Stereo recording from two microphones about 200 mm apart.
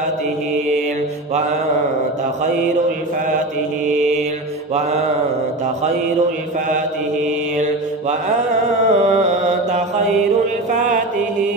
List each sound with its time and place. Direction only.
7.5 s mantra: 35° right (ahead or behind)
8.8 s a sound: 35° right (ahead or behind)
10.7 s mantra: 35° right (ahead or behind)